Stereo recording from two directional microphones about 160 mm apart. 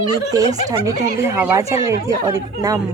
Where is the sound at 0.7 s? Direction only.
20° right (ahead or behind).